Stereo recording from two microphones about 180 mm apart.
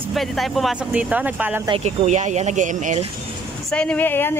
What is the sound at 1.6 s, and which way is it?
Speech, 35° right (ahead or behind).